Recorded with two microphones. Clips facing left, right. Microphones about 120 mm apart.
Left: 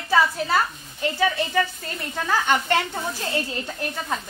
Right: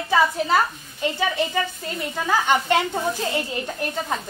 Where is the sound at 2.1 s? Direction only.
15° right (ahead or behind).